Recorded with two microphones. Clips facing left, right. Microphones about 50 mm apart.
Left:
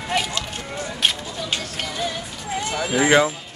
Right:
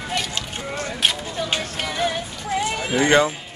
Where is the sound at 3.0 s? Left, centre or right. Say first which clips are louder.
Even; centre.